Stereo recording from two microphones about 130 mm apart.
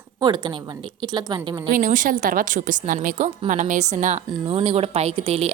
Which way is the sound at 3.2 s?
70° right (ahead or behind).